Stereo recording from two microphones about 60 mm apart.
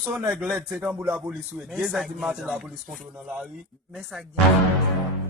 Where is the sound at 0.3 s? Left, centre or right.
Centre.